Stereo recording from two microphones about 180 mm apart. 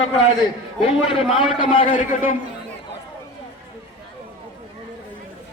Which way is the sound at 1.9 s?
50° left (ahead or behind).